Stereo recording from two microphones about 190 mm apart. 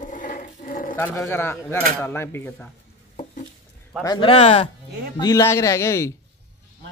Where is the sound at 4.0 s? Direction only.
25° left (ahead or behind).